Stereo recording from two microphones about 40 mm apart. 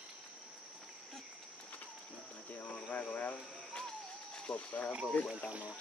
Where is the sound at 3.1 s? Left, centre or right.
Left.